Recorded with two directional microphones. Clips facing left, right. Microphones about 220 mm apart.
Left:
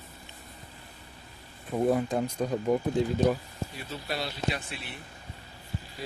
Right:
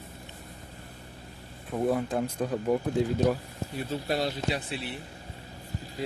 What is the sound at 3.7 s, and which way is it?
Speech, 45° right (ahead or behind).